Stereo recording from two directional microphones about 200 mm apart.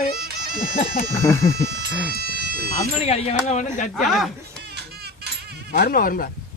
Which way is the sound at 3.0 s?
35° left (ahead or behind).